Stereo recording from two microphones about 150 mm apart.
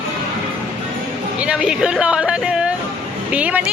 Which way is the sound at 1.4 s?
5° right (ahead or behind).